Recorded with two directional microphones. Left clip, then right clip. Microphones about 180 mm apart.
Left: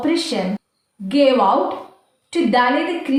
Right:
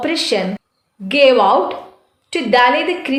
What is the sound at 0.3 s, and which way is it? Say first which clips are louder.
Speech: right 5 dB; 50° right (ahead or behind).